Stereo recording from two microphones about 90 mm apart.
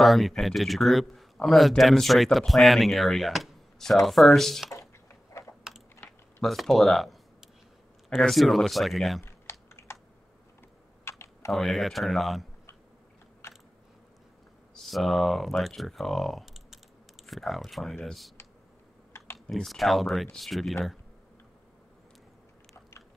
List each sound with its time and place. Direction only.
0.0 s speech: centre (ahead or behind)
5.7 s typing: 5° right (ahead or behind)
6.4 s speech: centre (ahead or behind)
9.2 s typing: 25° left (ahead or behind)
11.1 s computer keyboard: 30° left (ahead or behind)
11.5 s speech: centre (ahead or behind)
13.4 s a sound: 30° left (ahead or behind)
14.8 s speech: centre (ahead or behind)
19.4 s speech: centre (ahead or behind)